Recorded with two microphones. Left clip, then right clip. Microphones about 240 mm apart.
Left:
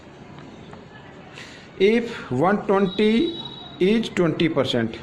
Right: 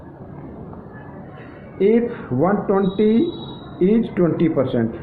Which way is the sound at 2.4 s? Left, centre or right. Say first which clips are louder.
Right 1 dB; left.